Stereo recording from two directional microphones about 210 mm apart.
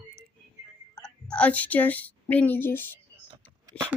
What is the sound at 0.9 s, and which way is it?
A woman's voice, 5° left (ahead or behind).